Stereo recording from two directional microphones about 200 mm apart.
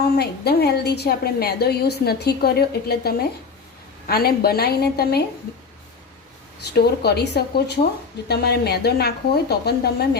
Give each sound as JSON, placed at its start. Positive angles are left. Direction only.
{"t": 0.0, "sound": "a woman's voice", "side_deg": 55}
{"t": 6.7, "sound": "a woman's voice", "side_deg": 55}